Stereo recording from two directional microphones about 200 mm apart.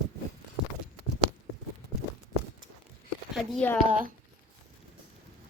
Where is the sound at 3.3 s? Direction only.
5° left (ahead or behind).